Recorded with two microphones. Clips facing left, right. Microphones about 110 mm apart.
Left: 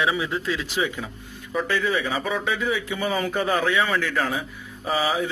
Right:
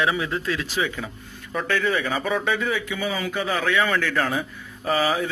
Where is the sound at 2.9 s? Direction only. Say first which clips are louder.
Left 2 dB; 40° left (ahead or behind).